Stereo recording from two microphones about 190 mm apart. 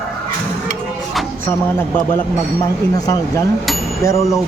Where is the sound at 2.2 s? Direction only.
20° left (ahead or behind).